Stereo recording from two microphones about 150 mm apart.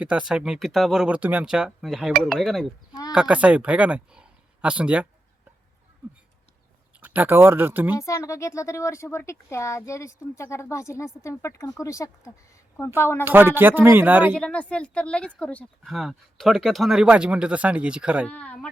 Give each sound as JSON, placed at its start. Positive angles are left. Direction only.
{"t": 0.0, "sound": "speech", "side_deg": -5}
{"t": 7.0, "sound": "speech", "side_deg": -10}
{"t": 7.9, "sound": "a woman's voice", "side_deg": 20}
{"t": 13.2, "sound": "speech", "side_deg": -15}
{"t": 14.3, "sound": "a woman's voice", "side_deg": 5}
{"t": 18.3, "sound": "a woman's voice", "side_deg": 10}